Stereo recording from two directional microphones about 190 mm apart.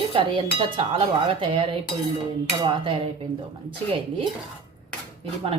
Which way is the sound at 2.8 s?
30° right (ahead or behind).